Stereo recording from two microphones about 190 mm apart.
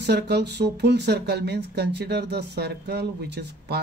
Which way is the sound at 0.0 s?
60° right (ahead or behind).